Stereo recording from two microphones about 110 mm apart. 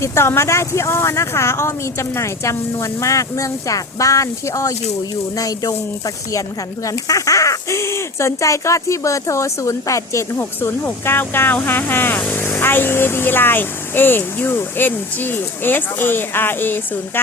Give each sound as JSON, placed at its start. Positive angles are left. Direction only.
{"t": 0.0, "sound": "speech", "side_deg": 25}
{"t": 5.4, "sound": "a sound", "side_deg": 30}
{"t": 6.8, "sound": "speech", "side_deg": 30}